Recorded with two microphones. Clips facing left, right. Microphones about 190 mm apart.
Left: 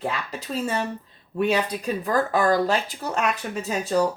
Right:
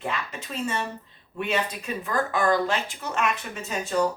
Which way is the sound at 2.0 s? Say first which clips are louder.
Left 3 dB; 35° left (ahead or behind).